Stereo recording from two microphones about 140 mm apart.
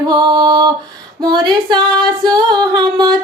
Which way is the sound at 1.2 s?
30° right (ahead or behind).